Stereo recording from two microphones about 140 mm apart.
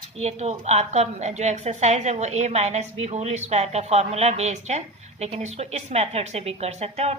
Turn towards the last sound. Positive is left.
turn(degrees=-50)  # may be behind; listen again after turning